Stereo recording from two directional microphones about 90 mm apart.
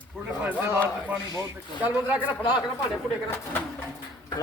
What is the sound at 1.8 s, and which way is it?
Speech, 20° right (ahead or behind).